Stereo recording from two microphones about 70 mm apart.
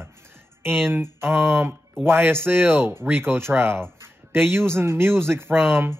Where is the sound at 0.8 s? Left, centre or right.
Right.